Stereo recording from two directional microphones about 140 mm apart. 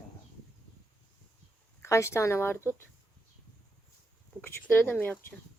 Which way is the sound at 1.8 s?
20° left (ahead or behind).